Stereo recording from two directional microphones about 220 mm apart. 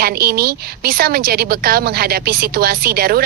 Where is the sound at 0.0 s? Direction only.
45° right (ahead or behind).